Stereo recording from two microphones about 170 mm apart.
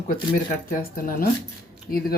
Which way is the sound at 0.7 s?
55° left (ahead or behind).